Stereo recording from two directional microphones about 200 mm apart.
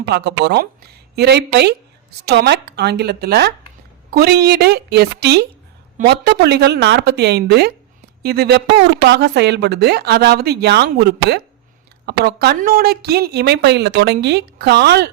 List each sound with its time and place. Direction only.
0.1 s a woman's voice: 55° right (ahead or behind)